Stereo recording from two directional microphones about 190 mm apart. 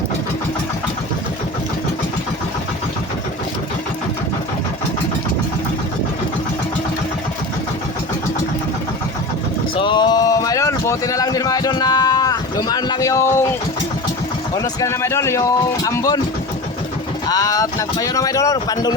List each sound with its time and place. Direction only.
9.7 s a sound: 25° left (ahead or behind)
14.5 s speech: 15° left (ahead or behind)
17.2 s speech: 20° left (ahead or behind)